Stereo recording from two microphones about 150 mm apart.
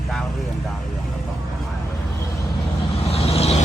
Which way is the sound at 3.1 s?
45° left (ahead or behind).